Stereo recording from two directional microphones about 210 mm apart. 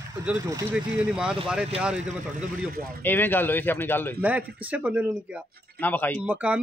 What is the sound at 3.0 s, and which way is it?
Speech, 10° left (ahead or behind).